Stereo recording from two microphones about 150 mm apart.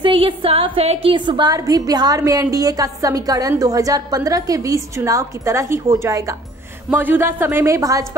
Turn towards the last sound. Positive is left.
turn(degrees=-20)  # may be behind; listen again after turning